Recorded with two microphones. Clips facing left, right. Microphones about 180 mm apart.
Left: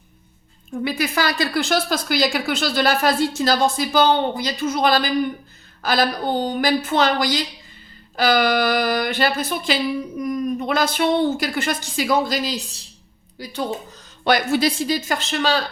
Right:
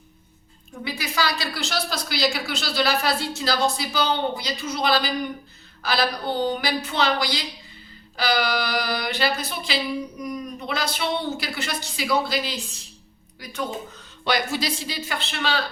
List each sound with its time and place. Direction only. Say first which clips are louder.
0.9 s a woman's voice: left 4 dB; 55° left (ahead or behind); by 13.7 s 30° left (ahead or behind)
14.3 s a woman's voice: left 6 dB; 55° left (ahead or behind)